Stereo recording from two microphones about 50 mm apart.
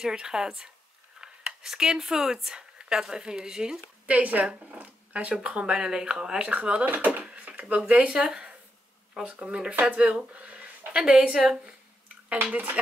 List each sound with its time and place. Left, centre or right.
0.0 s a woman's voice: centre
4.0 s speech: right
5.7 s speech: centre; by 7.2 s right
7.2 s a sound: right
7.7 s a woman's voice: right